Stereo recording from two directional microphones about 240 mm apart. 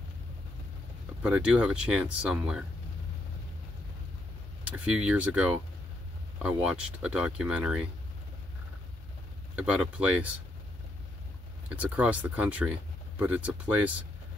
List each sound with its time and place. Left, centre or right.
1.2 s speech: centre
4.6 s speech: centre
7.0 s speech: centre
9.6 s speech: centre
11.7 s speech: centre